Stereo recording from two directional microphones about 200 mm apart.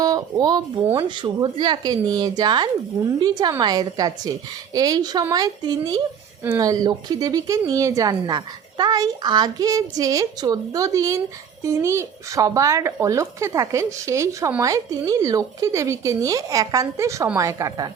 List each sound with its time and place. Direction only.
0.0 s a woman's voice: 20° right (ahead or behind)